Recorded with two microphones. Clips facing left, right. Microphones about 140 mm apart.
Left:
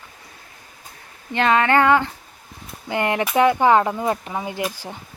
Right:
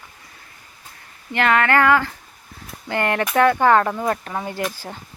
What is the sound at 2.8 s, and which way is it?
Speech, 15° left (ahead or behind).